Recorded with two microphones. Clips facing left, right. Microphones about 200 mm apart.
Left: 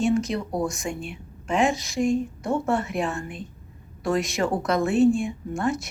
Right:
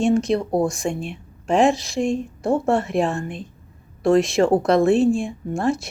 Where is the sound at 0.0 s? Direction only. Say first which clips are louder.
Right 4 dB; 30° right (ahead or behind).